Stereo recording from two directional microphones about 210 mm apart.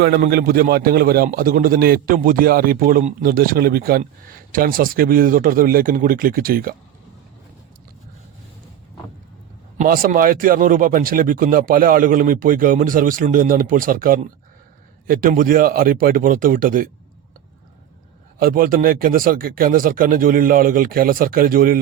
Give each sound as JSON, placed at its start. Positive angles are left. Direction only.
{"t": 0.0, "sound": "a man's voice", "side_deg": -50}
{"t": 9.7, "sound": "speech", "side_deg": -40}
{"t": 18.3, "sound": "a man's voice", "side_deg": -45}